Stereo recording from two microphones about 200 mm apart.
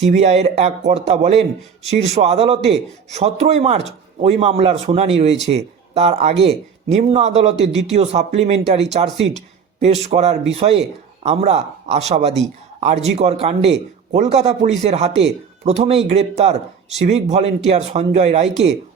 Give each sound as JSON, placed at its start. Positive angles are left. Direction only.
{"t": 0.0, "sound": "a man's voice", "side_deg": -35}